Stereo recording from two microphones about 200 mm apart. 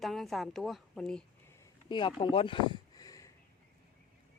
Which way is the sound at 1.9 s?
25° left (ahead or behind).